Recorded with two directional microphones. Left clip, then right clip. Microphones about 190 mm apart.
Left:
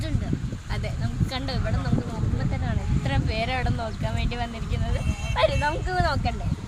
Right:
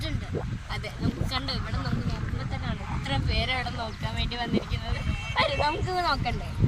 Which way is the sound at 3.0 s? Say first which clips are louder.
Left 1 dB; 15° left (ahead or behind).